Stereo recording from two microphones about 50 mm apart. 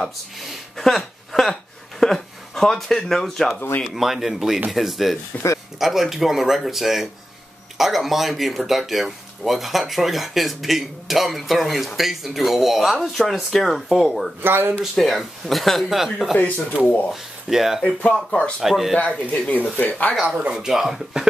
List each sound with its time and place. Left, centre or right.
0.0 s speech: centre
3.8 s speech: centre
5.4 s speech: left
5.8 s speech: centre
14.4 s speech: right
14.8 s speech: centre
16.3 s speech: left
17.1 s speech: centre
17.8 s speech: left
18.6 s speech: centre
18.9 s speech: left
20.5 s speech: centre